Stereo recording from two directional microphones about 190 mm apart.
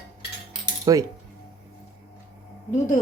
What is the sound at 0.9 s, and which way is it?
Speech, 20° right (ahead or behind).